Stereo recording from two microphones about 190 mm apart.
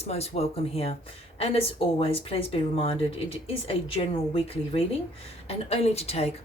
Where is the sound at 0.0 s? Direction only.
35° left (ahead or behind).